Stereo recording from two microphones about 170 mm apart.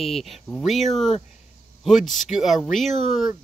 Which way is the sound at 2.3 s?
Centre (ahead or behind).